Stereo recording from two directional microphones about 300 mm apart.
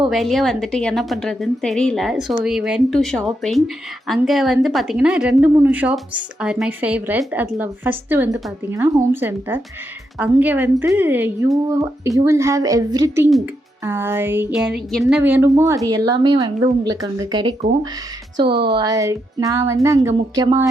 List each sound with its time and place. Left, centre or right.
0.1 s a woman's voice: centre
10.2 s music: centre
18.4 s a woman's voice: right
18.7 s music: centre